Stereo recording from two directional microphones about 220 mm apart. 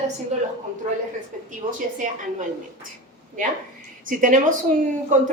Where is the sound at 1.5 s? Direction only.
35° right (ahead or behind).